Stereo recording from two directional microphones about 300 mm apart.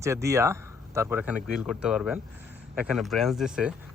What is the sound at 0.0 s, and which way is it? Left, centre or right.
Speech, centre.